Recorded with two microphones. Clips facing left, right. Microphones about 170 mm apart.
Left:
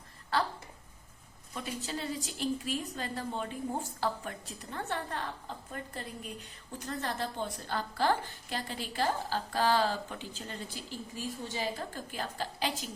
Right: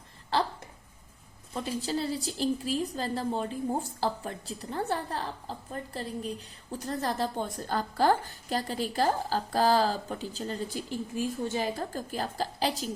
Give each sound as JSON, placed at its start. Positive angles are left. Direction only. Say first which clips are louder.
{"t": 1.5, "sound": "a woman's voice", "louder": "right 7 dB", "side_deg": -30}
{"t": 11.1, "sound": "a woman's voice", "louder": "right 8 dB", "side_deg": -50}